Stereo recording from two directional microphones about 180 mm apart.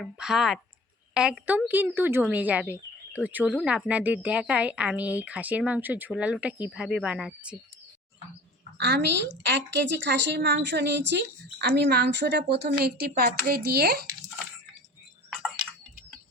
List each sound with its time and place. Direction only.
0.0 s speech: centre (ahead or behind)
8.8 s a woman's voice: 70° right (ahead or behind)